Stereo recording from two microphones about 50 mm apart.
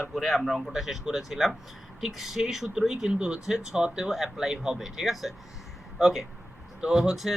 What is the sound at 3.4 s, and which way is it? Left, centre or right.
Speech, centre.